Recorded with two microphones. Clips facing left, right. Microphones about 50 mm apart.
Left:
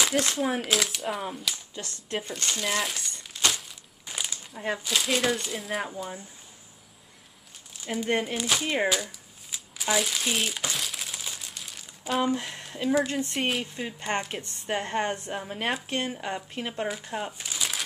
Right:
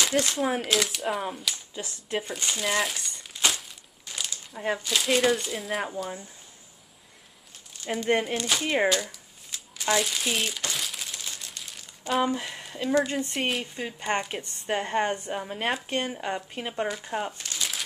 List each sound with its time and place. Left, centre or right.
0.0 s speech: centre
4.0 s a sound: centre
4.6 s speech: centre
7.7 s a sound: centre
8.4 s speech: centre
17.3 s crumpling: centre